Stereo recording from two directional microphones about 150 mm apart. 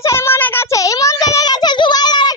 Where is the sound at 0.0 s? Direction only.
20° left (ahead or behind).